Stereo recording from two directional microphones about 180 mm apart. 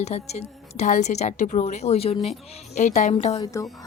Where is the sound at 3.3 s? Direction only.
20° left (ahead or behind).